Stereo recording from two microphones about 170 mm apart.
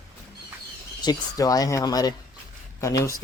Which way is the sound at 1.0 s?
20° left (ahead or behind).